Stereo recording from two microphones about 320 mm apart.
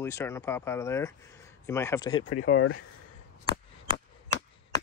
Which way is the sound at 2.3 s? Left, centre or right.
Left.